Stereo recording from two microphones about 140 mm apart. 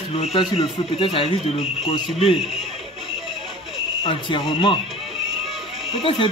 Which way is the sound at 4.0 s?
35° left (ahead or behind).